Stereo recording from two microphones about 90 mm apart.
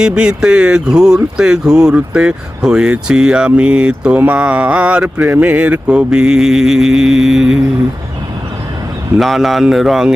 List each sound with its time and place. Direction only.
0.0 s speech: 10° right (ahead or behind)
9.1 s speech: centre (ahead or behind)